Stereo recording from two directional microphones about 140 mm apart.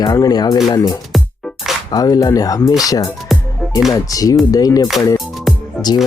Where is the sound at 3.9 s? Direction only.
25° left (ahead or behind).